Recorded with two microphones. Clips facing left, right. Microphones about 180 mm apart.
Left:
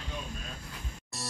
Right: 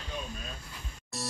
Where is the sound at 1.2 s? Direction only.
Centre (ahead or behind).